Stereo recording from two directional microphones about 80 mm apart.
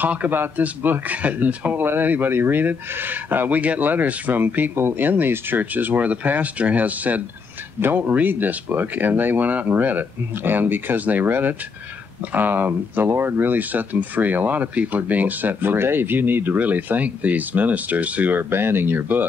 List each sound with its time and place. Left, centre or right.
0.0 s speech: centre